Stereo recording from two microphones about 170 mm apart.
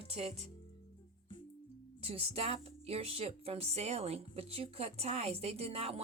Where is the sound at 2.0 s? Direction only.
35° right (ahead or behind).